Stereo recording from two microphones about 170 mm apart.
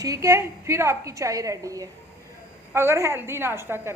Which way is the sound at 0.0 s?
20° right (ahead or behind).